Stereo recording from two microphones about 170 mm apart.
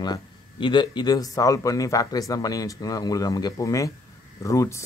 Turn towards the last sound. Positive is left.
turn(degrees=15)  # may be behind; listen again after turning